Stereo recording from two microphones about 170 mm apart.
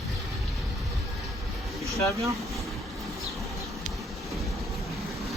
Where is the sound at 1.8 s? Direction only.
20° right (ahead or behind).